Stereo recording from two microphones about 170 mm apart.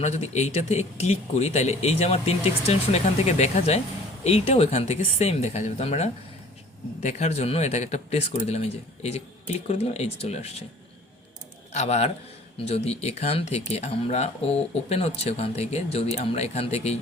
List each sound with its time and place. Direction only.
0.0 s speech: 40° left (ahead or behind)
11.7 s speech: 40° left (ahead or behind)